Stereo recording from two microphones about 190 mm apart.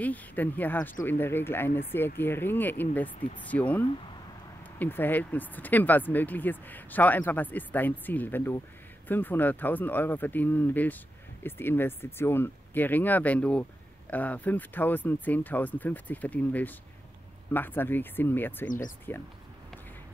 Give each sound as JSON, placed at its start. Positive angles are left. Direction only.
{"t": 0.0, "sound": "speech", "side_deg": 10}
{"t": 18.7, "sound": "speech", "side_deg": 45}